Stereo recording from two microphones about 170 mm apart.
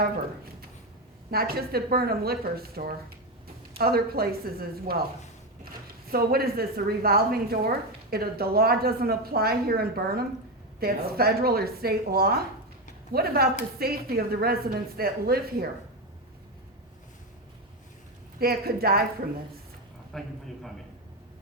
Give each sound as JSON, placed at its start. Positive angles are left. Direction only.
{"t": 1.3, "sound": "a woman's voice", "side_deg": -65}
{"t": 18.3, "sound": "a woman's voice", "side_deg": -65}
{"t": 20.1, "sound": "a man's voice", "side_deg": 0}